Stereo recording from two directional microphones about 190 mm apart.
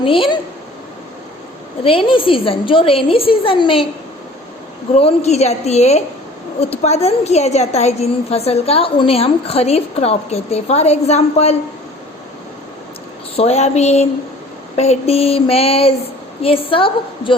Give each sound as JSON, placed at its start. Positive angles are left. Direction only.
{"t": 0.0, "sound": "a woman's voice", "side_deg": 30}
{"t": 1.8, "sound": "a woman's voice", "side_deg": 30}
{"t": 4.9, "sound": "a woman's voice", "side_deg": 35}
{"t": 13.3, "sound": "a woman's voice", "side_deg": 35}